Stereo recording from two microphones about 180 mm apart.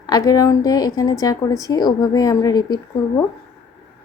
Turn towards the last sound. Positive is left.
turn(degrees=20)  # may be behind; listen again after turning